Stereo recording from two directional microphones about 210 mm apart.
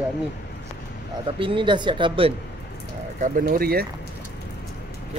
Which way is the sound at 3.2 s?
40° right (ahead or behind).